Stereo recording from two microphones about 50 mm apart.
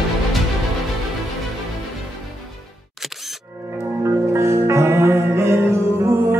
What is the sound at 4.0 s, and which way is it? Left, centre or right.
Music, right.